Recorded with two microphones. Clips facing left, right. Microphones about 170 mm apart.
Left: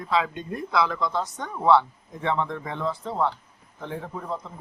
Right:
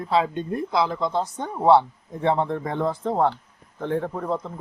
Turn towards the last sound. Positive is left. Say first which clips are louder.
# right 6 dB
turn(degrees=-55)  # may be behind; listen again after turning